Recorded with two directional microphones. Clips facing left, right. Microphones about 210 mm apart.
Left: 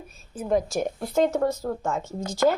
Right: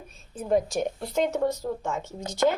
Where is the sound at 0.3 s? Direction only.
Centre (ahead or behind).